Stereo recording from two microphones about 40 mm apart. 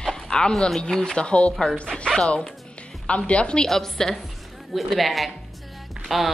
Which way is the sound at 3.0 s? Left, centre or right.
Left.